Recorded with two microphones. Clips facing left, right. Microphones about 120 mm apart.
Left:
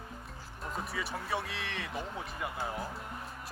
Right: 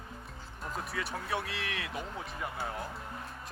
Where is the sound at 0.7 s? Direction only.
Centre (ahead or behind).